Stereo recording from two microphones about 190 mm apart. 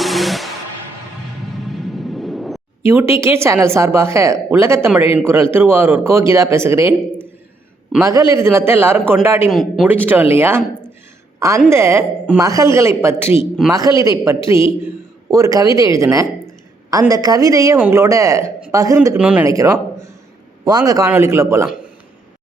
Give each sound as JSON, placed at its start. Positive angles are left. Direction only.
{"t": 0.0, "sound": "music", "side_deg": 0}
{"t": 1.5, "sound": "a sound", "side_deg": 0}
{"t": 2.8, "sound": "a woman's voice", "side_deg": -10}
{"t": 9.5, "sound": "a woman's voice", "side_deg": 0}
{"t": 10.6, "sound": "a sound", "side_deg": -10}
{"t": 11.3, "sound": "a woman's voice", "side_deg": -15}